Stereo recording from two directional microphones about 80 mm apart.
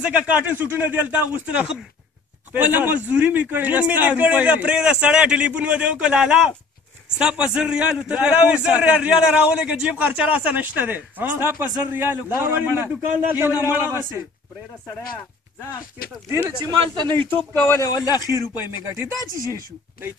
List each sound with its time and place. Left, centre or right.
0.0 s a man's voice: centre
17.0 s speech: left
17.8 s speech: left